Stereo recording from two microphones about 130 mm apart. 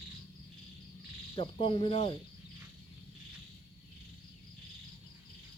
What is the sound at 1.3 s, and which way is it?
Speech, 45° left (ahead or behind).